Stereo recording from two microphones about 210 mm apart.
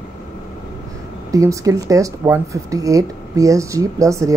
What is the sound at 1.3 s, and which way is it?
A woman's voice, 15° right (ahead or behind).